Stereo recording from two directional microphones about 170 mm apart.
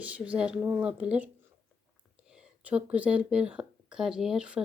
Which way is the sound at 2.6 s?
10° right (ahead or behind).